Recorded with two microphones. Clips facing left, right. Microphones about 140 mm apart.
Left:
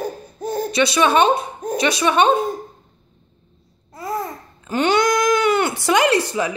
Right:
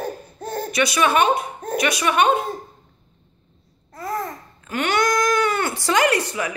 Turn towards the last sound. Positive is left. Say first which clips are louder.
# left 4 dB
turn(degrees=30)  # may be behind; listen again after turning